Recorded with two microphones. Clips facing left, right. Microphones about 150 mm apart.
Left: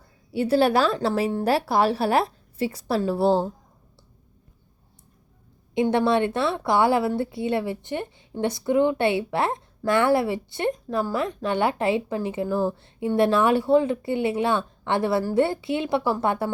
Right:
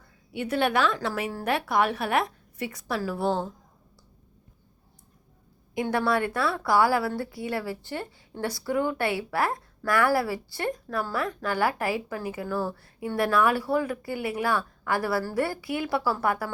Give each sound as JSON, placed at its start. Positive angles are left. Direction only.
{"t": 0.3, "sound": "a woman's voice", "side_deg": 35}
{"t": 5.7, "sound": "a woman's voice", "side_deg": 20}